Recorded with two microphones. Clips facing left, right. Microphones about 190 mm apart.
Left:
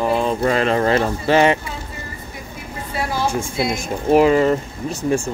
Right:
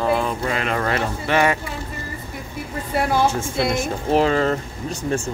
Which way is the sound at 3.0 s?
60° right (ahead or behind).